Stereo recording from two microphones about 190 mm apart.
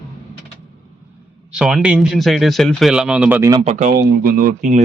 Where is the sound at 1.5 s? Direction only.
5° right (ahead or behind).